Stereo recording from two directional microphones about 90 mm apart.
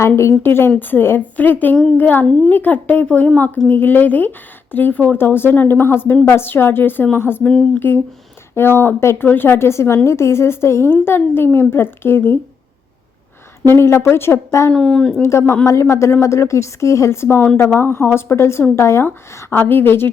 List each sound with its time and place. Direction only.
0.2 s a woman's voice: 25° left (ahead or behind)
13.7 s a woman's voice: 30° left (ahead or behind)
14.7 s speech: 10° left (ahead or behind)
15.2 s a woman's voice: 30° left (ahead or behind)